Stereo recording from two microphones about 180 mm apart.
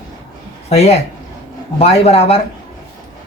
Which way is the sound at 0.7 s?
35° left (ahead or behind).